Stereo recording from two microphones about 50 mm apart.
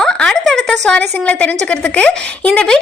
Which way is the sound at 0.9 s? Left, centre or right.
Left.